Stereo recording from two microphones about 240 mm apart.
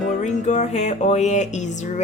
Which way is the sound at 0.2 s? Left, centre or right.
Left.